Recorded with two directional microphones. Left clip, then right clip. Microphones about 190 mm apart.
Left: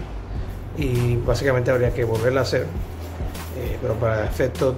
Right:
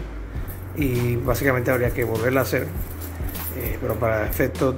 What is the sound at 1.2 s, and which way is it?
Speech, 20° right (ahead or behind).